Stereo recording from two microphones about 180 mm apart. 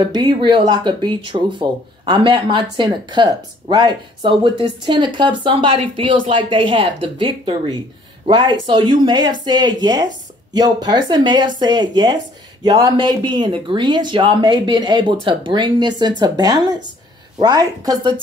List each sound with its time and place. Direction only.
0.0 s speech: 25° right (ahead or behind)